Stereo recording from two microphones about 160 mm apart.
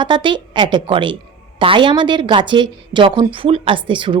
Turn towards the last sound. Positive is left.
turn(degrees=-30)  # may be behind; listen again after turning